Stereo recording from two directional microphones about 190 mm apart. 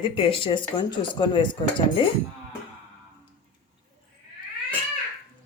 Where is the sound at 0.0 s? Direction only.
25° left (ahead or behind).